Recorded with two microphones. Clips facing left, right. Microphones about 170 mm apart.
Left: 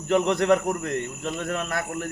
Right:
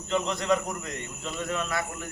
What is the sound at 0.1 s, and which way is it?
A man's voice, 65° left (ahead or behind).